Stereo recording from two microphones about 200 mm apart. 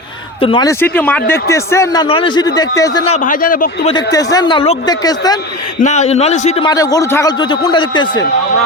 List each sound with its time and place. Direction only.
0.4 s a man's voice: 25° left (ahead or behind)
0.7 s a man's voice: 10° left (ahead or behind)
3.2 s a man's voice: 40° left (ahead or behind)
3.8 s a man's voice: 20° left (ahead or behind)
5.8 s a man's voice: 35° left (ahead or behind)
6.7 s a man's voice: 20° left (ahead or behind)